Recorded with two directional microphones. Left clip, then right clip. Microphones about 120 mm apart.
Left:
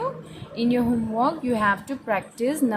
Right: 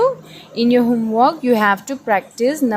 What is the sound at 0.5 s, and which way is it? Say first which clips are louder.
A woman's voice: right 8 dB; 50° right (ahead or behind).